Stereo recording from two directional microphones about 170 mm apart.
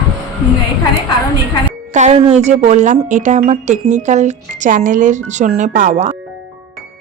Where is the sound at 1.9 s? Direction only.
40° right (ahead or behind).